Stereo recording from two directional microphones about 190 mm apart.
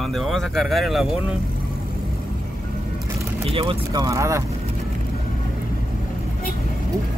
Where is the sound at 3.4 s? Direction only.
30° right (ahead or behind).